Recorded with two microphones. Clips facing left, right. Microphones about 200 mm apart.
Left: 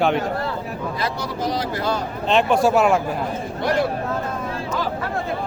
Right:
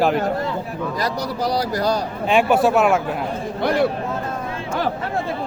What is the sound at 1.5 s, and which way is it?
Speech, 40° right (ahead or behind).